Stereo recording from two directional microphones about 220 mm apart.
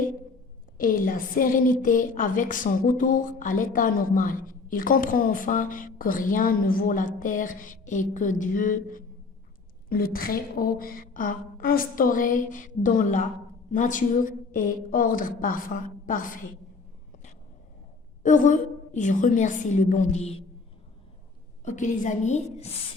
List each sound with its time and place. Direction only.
0.8 s a woman's voice: 40° left (ahead or behind)
18.2 s a woman's voice: 35° left (ahead or behind)
21.6 s a woman's voice: 35° left (ahead or behind)